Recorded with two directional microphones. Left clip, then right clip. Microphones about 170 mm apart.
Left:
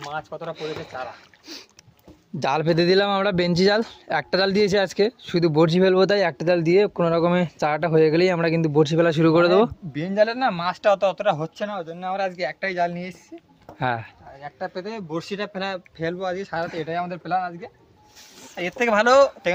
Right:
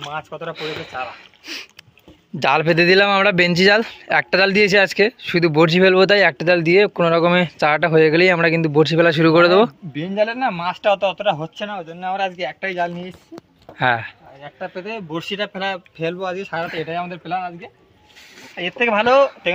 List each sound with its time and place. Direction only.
0.2 s speech: 35° right (ahead or behind)
0.5 s speech: 10° left (ahead or behind)
14.6 s speech: 35° right (ahead or behind); by 16.4 s 55° right (ahead or behind)
16.7 s speech: 10° right (ahead or behind)
17.2 s speech: 15° left (ahead or behind)
18.5 s speech: 5° right (ahead or behind)